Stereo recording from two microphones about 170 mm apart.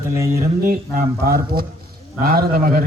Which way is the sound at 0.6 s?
60° right (ahead or behind).